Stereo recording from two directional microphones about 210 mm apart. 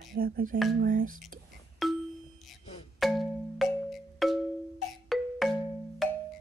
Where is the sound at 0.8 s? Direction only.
40° right (ahead or behind).